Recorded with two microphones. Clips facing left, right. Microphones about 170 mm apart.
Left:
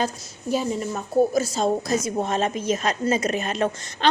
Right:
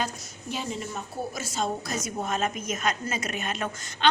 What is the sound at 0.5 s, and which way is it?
A woman's voice, 40° left (ahead or behind).